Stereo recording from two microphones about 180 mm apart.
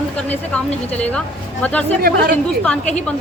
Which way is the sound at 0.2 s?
5° left (ahead or behind).